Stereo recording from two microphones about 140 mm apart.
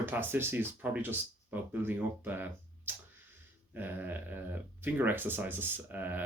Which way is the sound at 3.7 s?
15° right (ahead or behind).